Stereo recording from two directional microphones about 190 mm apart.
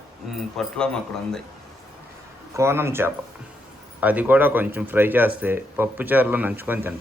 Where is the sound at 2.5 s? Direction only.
15° right (ahead or behind).